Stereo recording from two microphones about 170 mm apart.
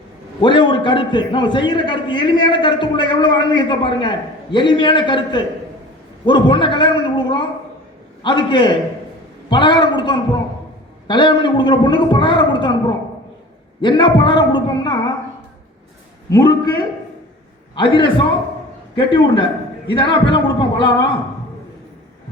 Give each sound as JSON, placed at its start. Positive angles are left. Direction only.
{"t": 0.4, "sound": "a man's voice", "side_deg": 30}
{"t": 13.8, "sound": "a man's voice", "side_deg": 25}
{"t": 16.3, "sound": "a man's voice", "side_deg": 25}